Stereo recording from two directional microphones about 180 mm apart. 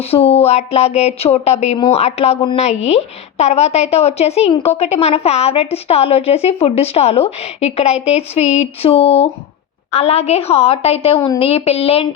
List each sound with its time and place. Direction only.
0.0 s a woman's voice: 35° left (ahead or behind)